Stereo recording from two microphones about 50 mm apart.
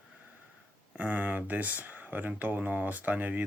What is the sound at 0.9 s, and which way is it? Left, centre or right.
Speech, right.